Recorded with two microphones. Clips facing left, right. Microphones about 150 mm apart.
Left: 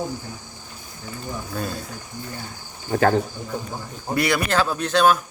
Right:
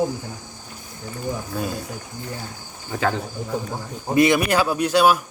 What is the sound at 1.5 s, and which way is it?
Speech, 10° right (ahead or behind).